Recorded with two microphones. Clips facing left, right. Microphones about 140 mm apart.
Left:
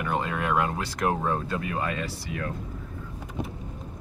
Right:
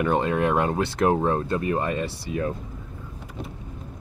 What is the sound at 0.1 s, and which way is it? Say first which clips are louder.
Speech: right 2 dB; 35° right (ahead or behind).